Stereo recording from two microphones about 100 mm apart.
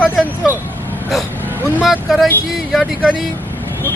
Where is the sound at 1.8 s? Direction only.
Centre (ahead or behind).